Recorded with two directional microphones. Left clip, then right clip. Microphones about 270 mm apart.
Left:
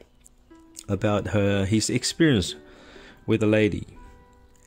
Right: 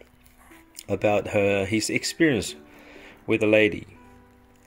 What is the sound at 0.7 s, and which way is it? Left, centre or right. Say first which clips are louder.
Speech: right 3 dB; centre.